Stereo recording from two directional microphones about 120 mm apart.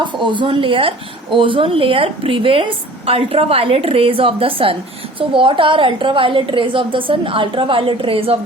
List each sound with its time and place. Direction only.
0.0 s speech: 40° right (ahead or behind)